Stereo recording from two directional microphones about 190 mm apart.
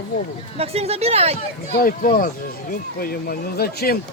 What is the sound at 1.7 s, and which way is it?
Speech, 50° left (ahead or behind).